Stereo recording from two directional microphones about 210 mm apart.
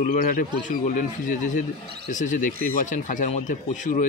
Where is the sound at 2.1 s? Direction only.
35° left (ahead or behind).